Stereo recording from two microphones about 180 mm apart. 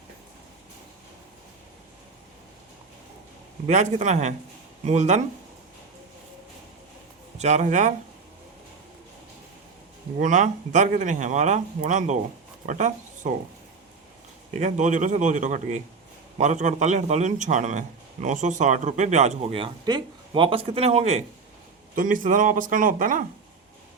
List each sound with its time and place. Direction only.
3.7 s a man's voice: 40° right (ahead or behind)
7.3 s speech: 40° right (ahead or behind)
10.2 s speech: 45° right (ahead or behind)
14.5 s a man's voice: 40° right (ahead or behind)
21.9 s speech: 45° right (ahead or behind)